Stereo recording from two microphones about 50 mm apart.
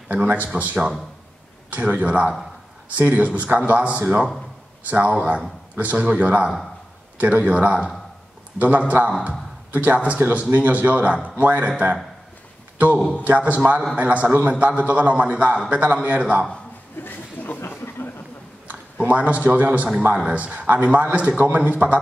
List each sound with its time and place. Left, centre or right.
0.1 s a man's voice: right
10.1 s a man's voice: right
17.0 s a sound: left
19.0 s a man's voice: right